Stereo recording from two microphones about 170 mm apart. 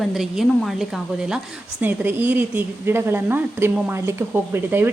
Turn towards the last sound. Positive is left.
turn(degrees=-10)  # may be behind; listen again after turning